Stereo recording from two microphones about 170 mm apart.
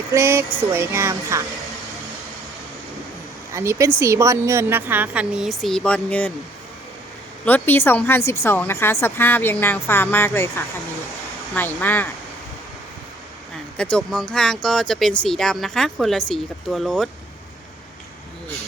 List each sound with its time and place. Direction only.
0.1 s a sound: 15° right (ahead or behind)
3.5 s a sound: 15° right (ahead or behind)
4.0 s speech: 15° right (ahead or behind); by 6.3 s 10° left (ahead or behind)
7.4 s a woman's voice: 10° left (ahead or behind)
11.5 s a woman's voice: 10° left (ahead or behind)
13.7 s speech: 5° left (ahead or behind)